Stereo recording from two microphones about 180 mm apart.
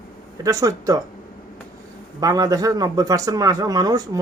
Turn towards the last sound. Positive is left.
turn(degrees=-20)  # may be behind; listen again after turning